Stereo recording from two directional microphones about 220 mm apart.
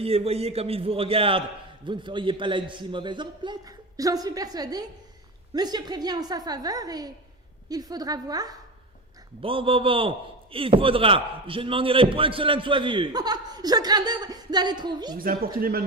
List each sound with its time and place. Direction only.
0.0 s a man's voice: 25° right (ahead or behind)
15.2 s speech: 40° right (ahead or behind)